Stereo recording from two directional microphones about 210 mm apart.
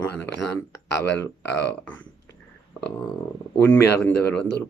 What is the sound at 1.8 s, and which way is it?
Speech, 5° left (ahead or behind).